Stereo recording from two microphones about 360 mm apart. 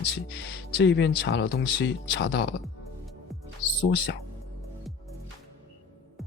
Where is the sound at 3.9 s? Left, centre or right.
Left.